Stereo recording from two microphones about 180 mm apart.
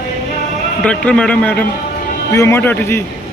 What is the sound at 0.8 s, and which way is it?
A man's voice, 5° left (ahead or behind).